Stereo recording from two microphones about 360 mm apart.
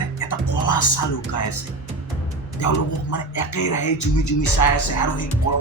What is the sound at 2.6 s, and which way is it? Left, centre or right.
Speech, left.